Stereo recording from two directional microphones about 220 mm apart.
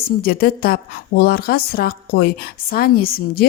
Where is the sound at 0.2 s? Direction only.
45° left (ahead or behind).